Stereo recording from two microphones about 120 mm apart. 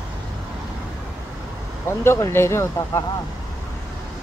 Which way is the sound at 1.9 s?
20° left (ahead or behind).